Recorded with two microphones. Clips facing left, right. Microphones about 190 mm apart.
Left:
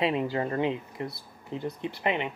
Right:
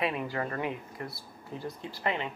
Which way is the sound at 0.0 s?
25° left (ahead or behind).